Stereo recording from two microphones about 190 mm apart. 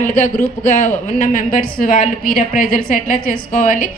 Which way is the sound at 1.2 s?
45° left (ahead or behind).